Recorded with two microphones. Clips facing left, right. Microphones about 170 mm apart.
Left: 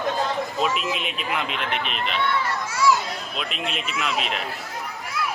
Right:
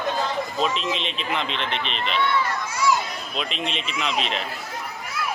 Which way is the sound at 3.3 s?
5° left (ahead or behind).